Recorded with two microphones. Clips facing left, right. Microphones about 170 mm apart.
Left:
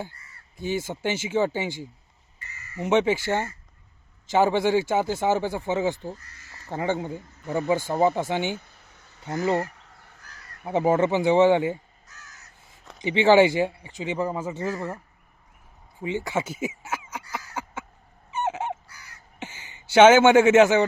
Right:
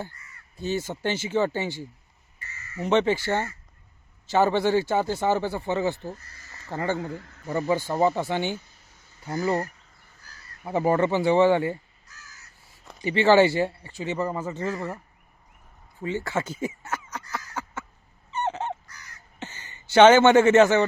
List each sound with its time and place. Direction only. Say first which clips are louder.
0.5 s speech: even; 10° left (ahead or behind)
7.1 s a man's voice: left 1 dB; 80° right
7.9 s speech: left 1 dB; 10° left (ahead or behind)
8.5 s a sound: even; 60° left (ahead or behind)
9.6 s a sound: left 3 dB; 90° left
10.7 s speech: left 1 dB; 20° left (ahead or behind)
12.0 s crow: left 2 dB; centre (ahead or behind)
13.0 s speech: left 1 dB; 15° left (ahead or behind)
16.0 s a sound: left 1 dB; 15° left (ahead or behind)
18.3 s fowl: left 1 dB; 10° left (ahead or behind)
19.4 s speech: even; 10° left (ahead or behind)